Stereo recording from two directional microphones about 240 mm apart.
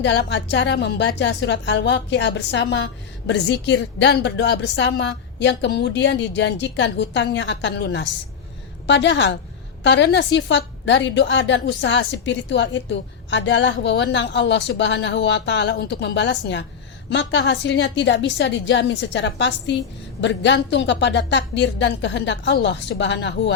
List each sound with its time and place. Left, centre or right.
0.0 s a woman's voice: left